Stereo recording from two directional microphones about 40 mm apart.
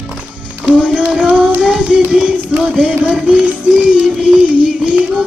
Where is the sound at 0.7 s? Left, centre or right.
Right.